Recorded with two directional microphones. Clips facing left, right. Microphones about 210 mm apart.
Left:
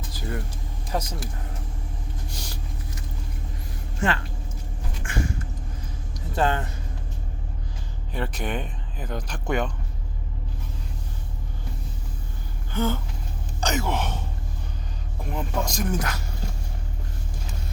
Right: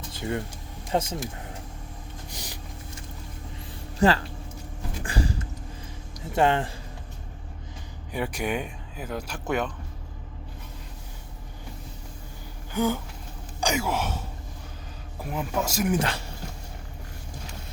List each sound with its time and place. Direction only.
0.1 s a sound: 25° right (ahead or behind)
0.9 s speech: 25° right (ahead or behind)
2.3 s vehicle: 15° right (ahead or behind)
3.9 s speech: 35° right (ahead or behind)
5.0 s a sound: 35° right (ahead or behind)
6.3 s speech: 20° right (ahead or behind)
8.1 s speech: 10° right (ahead or behind)
12.7 s speech: 10° right (ahead or behind)
16.0 s speech: 30° right (ahead or behind)